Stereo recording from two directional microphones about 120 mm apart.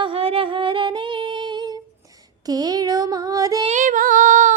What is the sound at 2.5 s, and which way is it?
Child singing, 35° right (ahead or behind).